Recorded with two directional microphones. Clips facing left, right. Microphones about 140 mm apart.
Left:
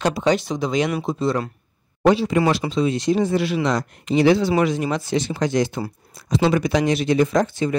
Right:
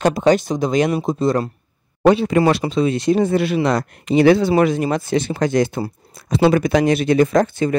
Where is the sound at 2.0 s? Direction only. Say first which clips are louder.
Right 3 dB; 55° right (ahead or behind).